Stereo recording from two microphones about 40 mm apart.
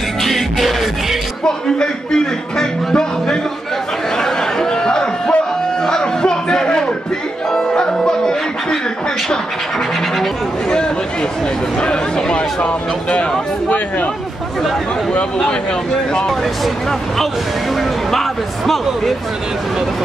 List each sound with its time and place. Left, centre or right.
0.2 s music: centre
1.4 s a man's voice: centre
4.2 s chatter: centre
5.9 s a sound: centre
7.5 s music: centre
11.8 s a sound: left